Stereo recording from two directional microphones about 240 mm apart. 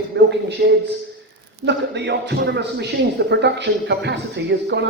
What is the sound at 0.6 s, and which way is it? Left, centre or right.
A man's voice, right.